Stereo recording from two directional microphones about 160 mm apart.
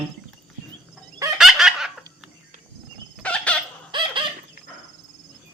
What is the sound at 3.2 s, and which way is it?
Chicken, 10° left (ahead or behind).